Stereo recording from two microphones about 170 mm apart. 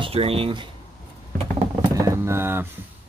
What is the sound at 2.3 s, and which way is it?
Speech, 15° right (ahead or behind).